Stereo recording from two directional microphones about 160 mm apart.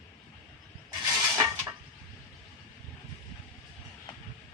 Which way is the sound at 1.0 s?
20° right (ahead or behind).